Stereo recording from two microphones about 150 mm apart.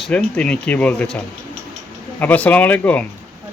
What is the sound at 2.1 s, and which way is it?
Speech, 10° left (ahead or behind).